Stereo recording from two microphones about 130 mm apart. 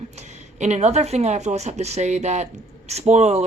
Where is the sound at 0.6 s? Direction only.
60° right (ahead or behind).